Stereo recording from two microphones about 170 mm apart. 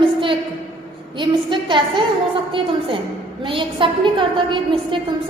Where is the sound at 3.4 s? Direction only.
30° right (ahead or behind).